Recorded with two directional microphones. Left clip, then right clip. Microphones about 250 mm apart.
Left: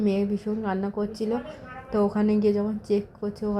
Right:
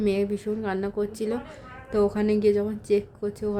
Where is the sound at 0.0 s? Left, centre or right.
Centre.